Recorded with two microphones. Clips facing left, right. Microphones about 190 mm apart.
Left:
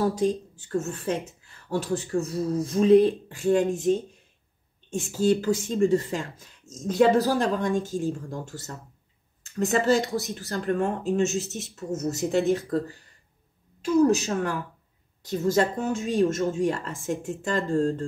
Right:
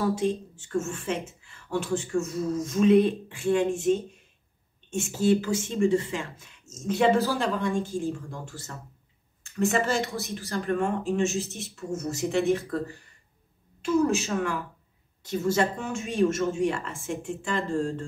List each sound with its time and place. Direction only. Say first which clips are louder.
0.0 s speech: left 2 dB; 40° left (ahead or behind)
13.8 s speech: left 3 dB; 40° left (ahead or behind)